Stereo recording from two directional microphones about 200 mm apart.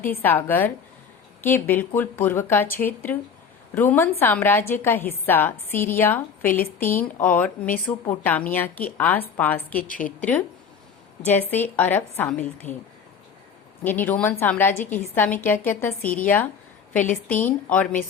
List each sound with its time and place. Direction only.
0.1 s a woman's voice: 10° left (ahead or behind)
11.5 s a woman's voice: 10° left (ahead or behind)
13.8 s a woman's voice: 10° left (ahead or behind)
14.8 s a woman's voice: 40° left (ahead or behind)
15.0 s a woman's voice: 10° left (ahead or behind)